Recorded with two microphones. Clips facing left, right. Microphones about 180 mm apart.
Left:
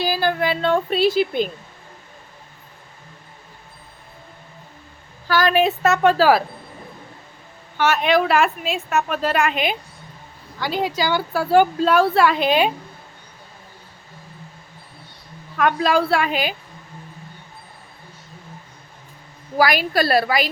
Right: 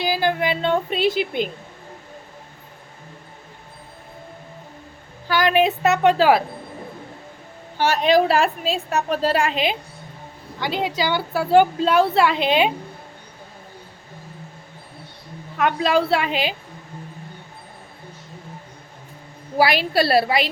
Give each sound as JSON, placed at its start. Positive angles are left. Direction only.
{"t": 0.0, "sound": "a woman's voice", "side_deg": -20}
{"t": 5.3, "sound": "a woman's voice", "side_deg": -20}
{"t": 7.8, "sound": "a woman's voice", "side_deg": -35}
{"t": 15.5, "sound": "a woman's voice", "side_deg": -25}
{"t": 19.5, "sound": "a woman's voice", "side_deg": -30}